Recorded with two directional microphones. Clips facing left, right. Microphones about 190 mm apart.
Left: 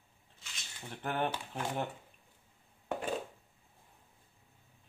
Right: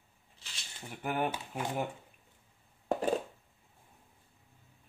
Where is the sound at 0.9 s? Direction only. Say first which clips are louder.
Right 1 dB; 10° right (ahead or behind).